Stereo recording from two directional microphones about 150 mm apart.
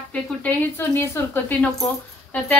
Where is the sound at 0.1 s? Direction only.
10° left (ahead or behind).